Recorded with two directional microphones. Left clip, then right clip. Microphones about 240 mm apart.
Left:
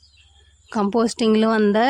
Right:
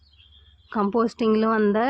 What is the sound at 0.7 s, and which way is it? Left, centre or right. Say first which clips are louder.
Speech: left 2 dB; left.